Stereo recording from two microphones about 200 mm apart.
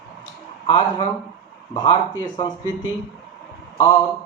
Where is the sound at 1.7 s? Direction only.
20° left (ahead or behind).